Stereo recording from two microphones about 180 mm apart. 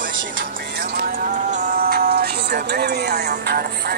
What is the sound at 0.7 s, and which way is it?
Music, 55° right (ahead or behind).